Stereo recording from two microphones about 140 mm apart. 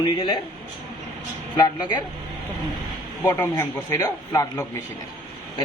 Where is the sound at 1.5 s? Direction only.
35° left (ahead or behind).